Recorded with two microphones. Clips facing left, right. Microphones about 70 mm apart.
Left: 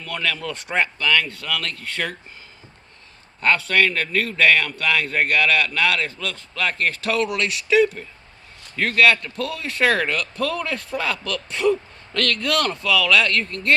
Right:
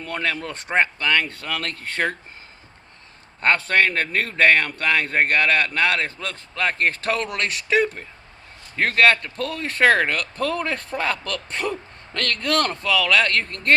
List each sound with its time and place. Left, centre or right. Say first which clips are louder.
0.0 s speech: even; right
3.4 s speech: even; right